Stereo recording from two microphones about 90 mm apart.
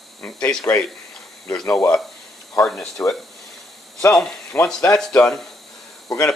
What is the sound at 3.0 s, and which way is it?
Speech, 20° left (ahead or behind).